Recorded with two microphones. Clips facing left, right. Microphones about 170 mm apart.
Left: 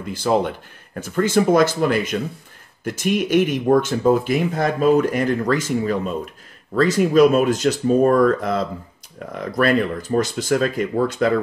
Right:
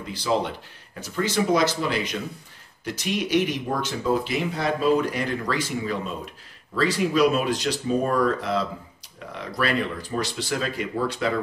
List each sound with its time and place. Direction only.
0.0 s speech: 50° left (ahead or behind)